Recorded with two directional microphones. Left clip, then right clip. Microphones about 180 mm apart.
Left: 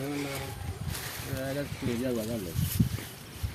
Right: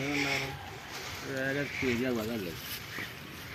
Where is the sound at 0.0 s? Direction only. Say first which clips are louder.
Right 4 dB; 15° left (ahead or behind).